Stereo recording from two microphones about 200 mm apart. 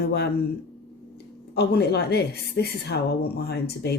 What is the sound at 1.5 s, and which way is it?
A woman's voice, 55° left (ahead or behind).